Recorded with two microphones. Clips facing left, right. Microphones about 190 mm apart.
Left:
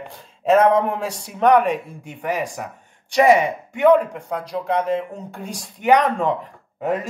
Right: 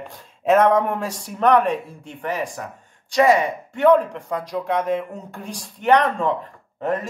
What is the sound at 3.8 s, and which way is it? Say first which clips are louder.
Speech: left 1 dB; 5° left (ahead or behind).